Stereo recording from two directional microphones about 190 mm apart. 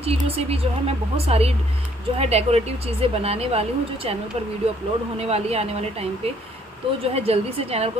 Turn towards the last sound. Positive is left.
turn(degrees=-30)  # may be behind; listen again after turning